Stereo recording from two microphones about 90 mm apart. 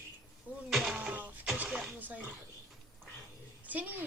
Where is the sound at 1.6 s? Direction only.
10° right (ahead or behind).